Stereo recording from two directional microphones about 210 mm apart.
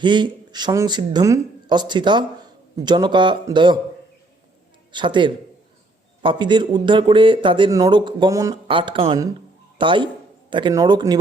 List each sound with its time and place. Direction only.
0.0 s speech: 20° right (ahead or behind)
4.9 s speech: 20° right (ahead or behind)